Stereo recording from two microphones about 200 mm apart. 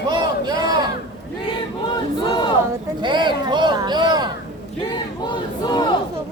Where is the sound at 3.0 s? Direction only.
25° right (ahead or behind).